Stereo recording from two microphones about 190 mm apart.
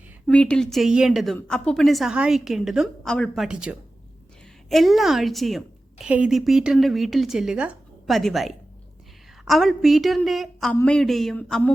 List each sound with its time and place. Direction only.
0.3 s a woman's voice: 5° left (ahead or behind)